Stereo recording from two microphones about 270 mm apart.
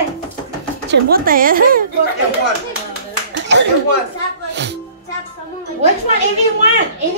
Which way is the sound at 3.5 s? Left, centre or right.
Right.